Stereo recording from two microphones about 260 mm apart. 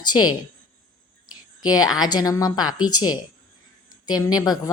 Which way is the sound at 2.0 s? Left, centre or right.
Centre.